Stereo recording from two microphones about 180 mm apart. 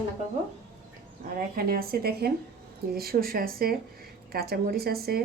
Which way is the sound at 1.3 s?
55° right (ahead or behind).